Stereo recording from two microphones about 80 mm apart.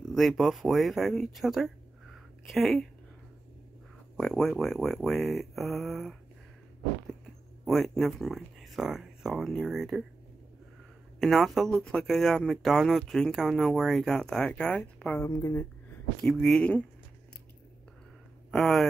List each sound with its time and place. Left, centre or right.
0.1 s speech: centre
4.2 s speech: centre
7.6 s speech: centre
11.1 s a woman's voice: centre
15.2 s speech: left
16.2 s speech: centre
18.5 s speech: centre